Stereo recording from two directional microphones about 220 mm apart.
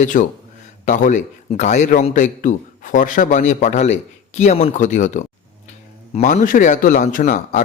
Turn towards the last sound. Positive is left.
turn(degrees=35)  # may be behind; listen again after turning